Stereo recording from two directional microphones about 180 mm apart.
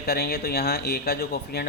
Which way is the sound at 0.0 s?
60° left (ahead or behind).